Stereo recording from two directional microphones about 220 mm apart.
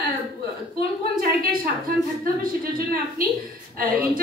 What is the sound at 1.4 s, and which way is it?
Speech, 40° right (ahead or behind).